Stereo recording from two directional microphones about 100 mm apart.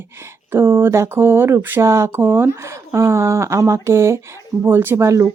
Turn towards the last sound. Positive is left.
turn(degrees=-30)  # may be behind; listen again after turning